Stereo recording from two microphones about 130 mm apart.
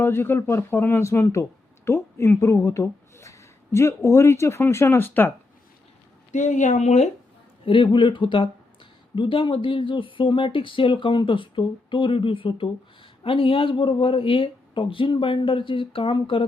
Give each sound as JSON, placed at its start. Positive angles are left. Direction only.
{"t": 0.0, "sound": "speech", "side_deg": 15}
{"t": 6.3, "sound": "speech", "side_deg": 70}
{"t": 7.6, "sound": "a woman's voice", "side_deg": 40}